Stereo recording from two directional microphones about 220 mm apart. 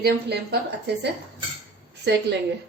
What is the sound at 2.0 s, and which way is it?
Speech, 50° right (ahead or behind).